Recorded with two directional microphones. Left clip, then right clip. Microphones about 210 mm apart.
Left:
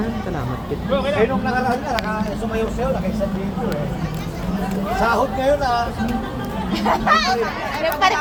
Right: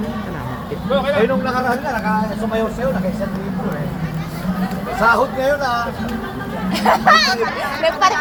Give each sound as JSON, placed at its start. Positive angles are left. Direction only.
{"t": 5.0, "sound": "speech", "side_deg": -10}
{"t": 6.7, "sound": "speech", "side_deg": -50}
{"t": 7.9, "sound": "speech", "side_deg": -20}